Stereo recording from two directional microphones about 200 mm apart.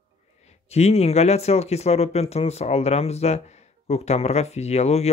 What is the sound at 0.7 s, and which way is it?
Speech, 30° left (ahead or behind).